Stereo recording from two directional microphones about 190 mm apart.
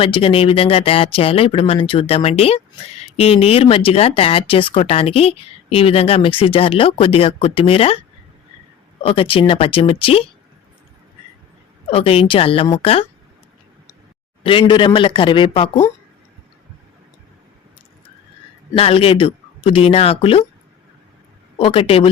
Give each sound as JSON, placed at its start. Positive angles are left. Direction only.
{"t": 0.0, "sound": "speech", "side_deg": 30}
{"t": 9.0, "sound": "speech", "side_deg": 30}
{"t": 11.9, "sound": "speech", "side_deg": 30}
{"t": 14.6, "sound": "speech", "side_deg": 25}
{"t": 18.8, "sound": "speech", "side_deg": 30}
{"t": 21.6, "sound": "speech", "side_deg": 30}